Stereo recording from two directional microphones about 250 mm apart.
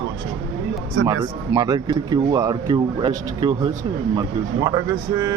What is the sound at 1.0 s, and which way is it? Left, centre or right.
Speech, right.